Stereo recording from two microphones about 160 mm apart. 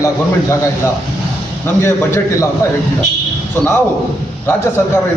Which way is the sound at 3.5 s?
15° left (ahead or behind).